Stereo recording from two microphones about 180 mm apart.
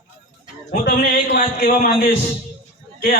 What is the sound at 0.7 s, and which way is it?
A man's voice, 50° left (ahead or behind).